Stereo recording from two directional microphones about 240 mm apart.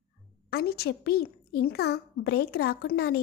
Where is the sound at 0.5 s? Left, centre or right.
Left.